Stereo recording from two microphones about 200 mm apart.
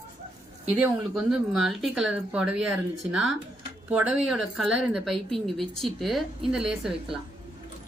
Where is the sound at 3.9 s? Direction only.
5° right (ahead or behind).